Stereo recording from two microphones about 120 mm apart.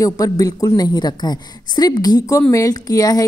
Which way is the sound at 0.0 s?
30° left (ahead or behind).